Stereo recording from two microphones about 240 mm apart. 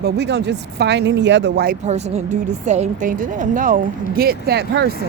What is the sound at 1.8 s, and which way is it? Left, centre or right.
A woman's voice, right.